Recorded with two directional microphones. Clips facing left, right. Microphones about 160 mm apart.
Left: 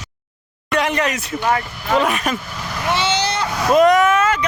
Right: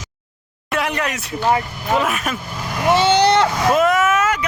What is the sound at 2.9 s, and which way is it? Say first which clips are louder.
Vehicle: right 7 dB; 50° right (ahead or behind).